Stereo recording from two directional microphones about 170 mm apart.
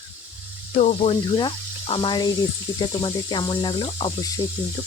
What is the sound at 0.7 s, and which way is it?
Speech, 40° left (ahead or behind).